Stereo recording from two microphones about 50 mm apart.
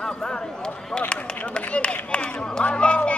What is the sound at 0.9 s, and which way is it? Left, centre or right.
Run, left.